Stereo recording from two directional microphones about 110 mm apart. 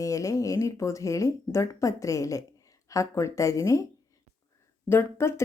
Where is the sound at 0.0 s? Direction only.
30° left (ahead or behind).